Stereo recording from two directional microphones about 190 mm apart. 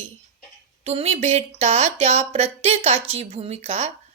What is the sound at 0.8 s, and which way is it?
Speech, 35° right (ahead or behind).